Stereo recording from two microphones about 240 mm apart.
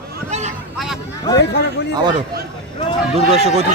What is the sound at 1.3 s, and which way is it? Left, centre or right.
Speech, left.